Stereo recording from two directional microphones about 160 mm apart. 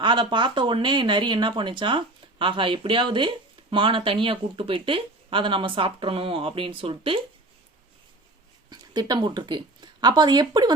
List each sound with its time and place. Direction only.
0.0 s speech: 30° right (ahead or behind)
8.7 s speech: 25° right (ahead or behind)